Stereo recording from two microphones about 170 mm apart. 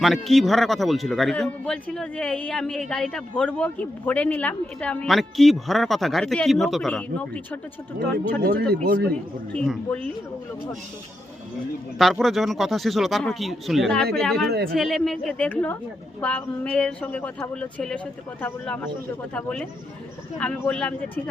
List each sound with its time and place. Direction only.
0.0 s a man's voice: centre (ahead or behind)
8.4 s speech: 70° right (ahead or behind)
9.5 s a woman's voice: 5° left (ahead or behind)
12.2 s a man's voice: centre (ahead or behind)
14.4 s speech: 70° right (ahead or behind)
14.7 s a man's voice: centre (ahead or behind)